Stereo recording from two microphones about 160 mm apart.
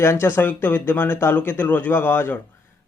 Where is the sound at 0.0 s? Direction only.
15° left (ahead or behind).